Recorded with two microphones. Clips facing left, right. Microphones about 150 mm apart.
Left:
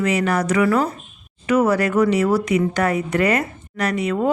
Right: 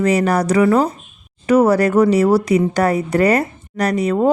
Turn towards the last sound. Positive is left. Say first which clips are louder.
# right 4 dB
turn(degrees=-35)  # may be behind; listen again after turning